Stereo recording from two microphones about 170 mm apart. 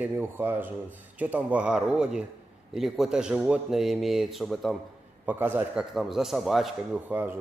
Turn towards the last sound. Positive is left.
turn(degrees=-10)  # may be behind; listen again after turning